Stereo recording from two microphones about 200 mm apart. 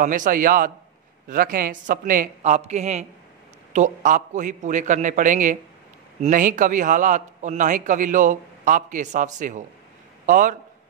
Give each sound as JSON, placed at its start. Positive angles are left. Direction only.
{"t": 0.0, "sound": "a man's voice", "side_deg": -40}